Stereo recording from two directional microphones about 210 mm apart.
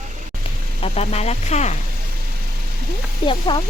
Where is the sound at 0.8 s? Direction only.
30° left (ahead or behind).